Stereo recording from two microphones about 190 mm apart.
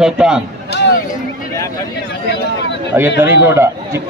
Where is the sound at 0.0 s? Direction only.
5° right (ahead or behind).